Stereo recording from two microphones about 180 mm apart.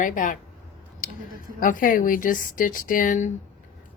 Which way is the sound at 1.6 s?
50° left (ahead or behind).